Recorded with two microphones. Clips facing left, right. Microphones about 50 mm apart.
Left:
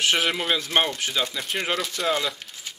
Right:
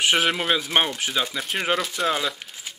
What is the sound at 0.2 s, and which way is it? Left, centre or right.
Speech, centre.